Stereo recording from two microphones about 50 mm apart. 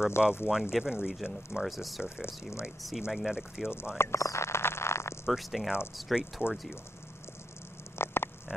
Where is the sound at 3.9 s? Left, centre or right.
Left.